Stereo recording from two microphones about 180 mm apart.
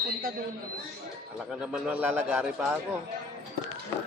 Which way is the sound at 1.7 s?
10° right (ahead or behind).